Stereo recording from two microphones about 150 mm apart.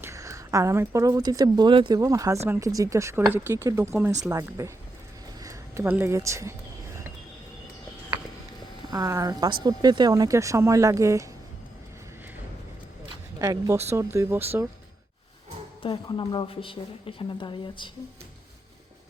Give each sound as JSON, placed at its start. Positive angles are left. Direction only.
{"t": 0.0, "sound": "speech", "side_deg": -20}
{"t": 8.9, "sound": "speech", "side_deg": -20}
{"t": 13.4, "sound": "speech", "side_deg": -20}
{"t": 15.8, "sound": "a woman's voice", "side_deg": 30}